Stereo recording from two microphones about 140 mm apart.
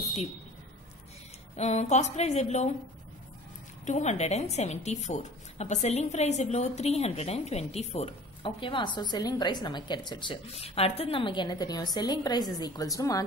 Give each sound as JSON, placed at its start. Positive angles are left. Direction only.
{"t": 1.6, "sound": "a woman's voice", "side_deg": 55}
{"t": 3.8, "sound": "a woman's voice", "side_deg": 55}